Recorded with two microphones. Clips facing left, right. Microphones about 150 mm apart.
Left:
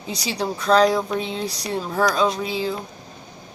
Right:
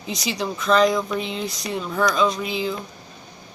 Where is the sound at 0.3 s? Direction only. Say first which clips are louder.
Left 2 dB; 35° left (ahead or behind).